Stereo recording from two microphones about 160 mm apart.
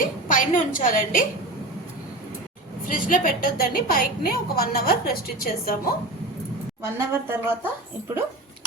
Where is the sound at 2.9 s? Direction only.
60° left (ahead or behind).